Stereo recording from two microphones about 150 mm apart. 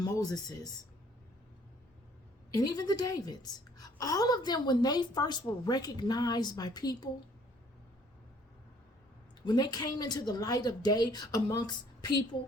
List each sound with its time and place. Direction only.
0.0 s speech: 25° left (ahead or behind)
2.5 s a woman's voice: 25° left (ahead or behind)
9.4 s a woman's voice: 25° left (ahead or behind)